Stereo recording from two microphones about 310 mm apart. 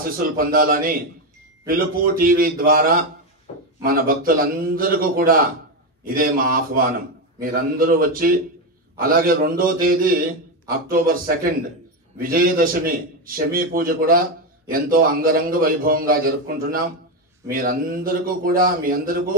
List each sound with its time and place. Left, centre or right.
0.4 s a man's voice: right
3.5 s a sound: centre
3.8 s a man's voice: right